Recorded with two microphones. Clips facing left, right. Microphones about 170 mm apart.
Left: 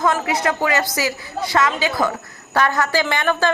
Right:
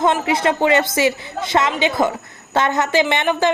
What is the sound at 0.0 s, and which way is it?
Speech, 25° right (ahead or behind).